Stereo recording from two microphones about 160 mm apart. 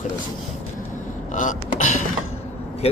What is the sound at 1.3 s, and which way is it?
Burping, 55° left (ahead or behind).